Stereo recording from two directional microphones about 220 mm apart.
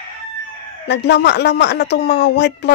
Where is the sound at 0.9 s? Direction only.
50° left (ahead or behind).